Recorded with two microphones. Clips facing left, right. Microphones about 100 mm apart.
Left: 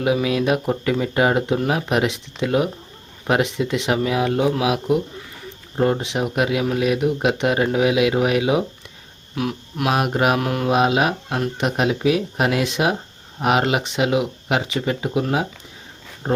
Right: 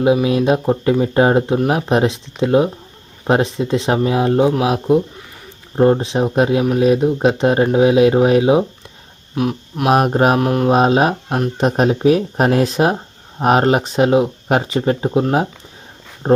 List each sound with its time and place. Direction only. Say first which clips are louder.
0.0 s speech: right 5 dB; 25° right (ahead or behind)
9.9 s speech: right 6 dB; 40° right (ahead or behind)
10.4 s speech: right 6 dB; 25° right (ahead or behind)
10.7 s speech: right 3 dB; 35° right (ahead or behind)